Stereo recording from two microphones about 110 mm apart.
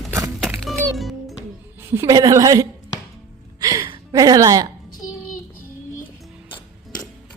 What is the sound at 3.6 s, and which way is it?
Music, 40° right (ahead or behind).